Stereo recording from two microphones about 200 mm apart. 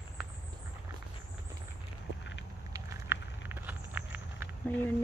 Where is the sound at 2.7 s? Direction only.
15° right (ahead or behind).